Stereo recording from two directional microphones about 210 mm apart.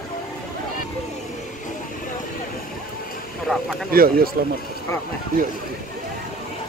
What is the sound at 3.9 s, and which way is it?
Speech, 45° right (ahead or behind).